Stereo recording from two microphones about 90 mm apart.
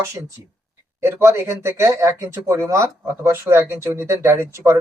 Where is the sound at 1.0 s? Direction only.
25° right (ahead or behind).